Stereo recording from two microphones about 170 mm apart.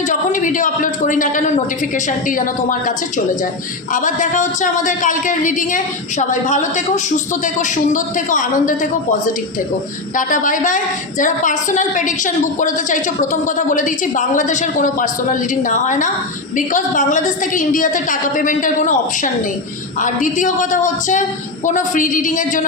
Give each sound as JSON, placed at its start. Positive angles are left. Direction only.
{"t": 0.1, "sound": "a woman's voice", "side_deg": 50}
{"t": 3.9, "sound": "a woman's voice", "side_deg": 50}